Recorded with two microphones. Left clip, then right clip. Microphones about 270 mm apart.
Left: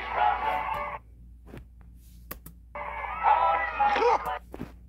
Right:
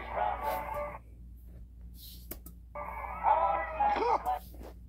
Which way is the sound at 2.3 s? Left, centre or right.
Left.